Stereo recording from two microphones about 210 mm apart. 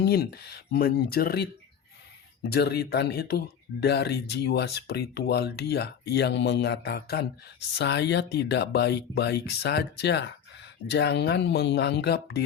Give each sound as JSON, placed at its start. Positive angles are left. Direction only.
{"t": 0.0, "sound": "speech", "side_deg": 50}